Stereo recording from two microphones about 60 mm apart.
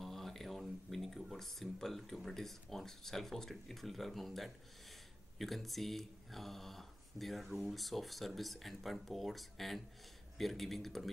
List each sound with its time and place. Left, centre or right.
0.0 s speech: centre